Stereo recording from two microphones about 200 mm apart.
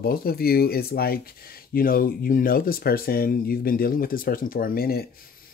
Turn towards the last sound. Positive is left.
turn(degrees=50)  # may be behind; listen again after turning